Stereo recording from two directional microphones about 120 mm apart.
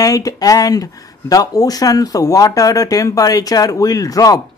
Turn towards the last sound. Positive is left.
turn(degrees=30)  # may be behind; listen again after turning